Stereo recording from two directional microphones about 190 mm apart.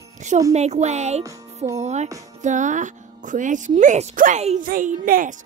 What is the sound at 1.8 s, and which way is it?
A child's voice, 35° right (ahead or behind).